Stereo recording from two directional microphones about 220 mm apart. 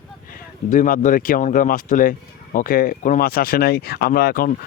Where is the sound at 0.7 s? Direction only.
35° left (ahead or behind).